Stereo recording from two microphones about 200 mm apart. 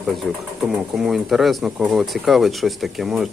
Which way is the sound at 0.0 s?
Centre (ahead or behind).